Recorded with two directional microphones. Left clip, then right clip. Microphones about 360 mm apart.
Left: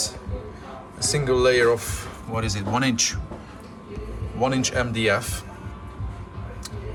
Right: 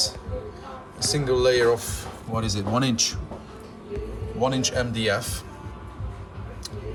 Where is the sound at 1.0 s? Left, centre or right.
Centre.